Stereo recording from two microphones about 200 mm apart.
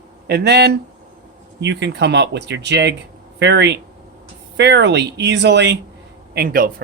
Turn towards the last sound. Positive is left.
turn(degrees=-45)  # may be behind; listen again after turning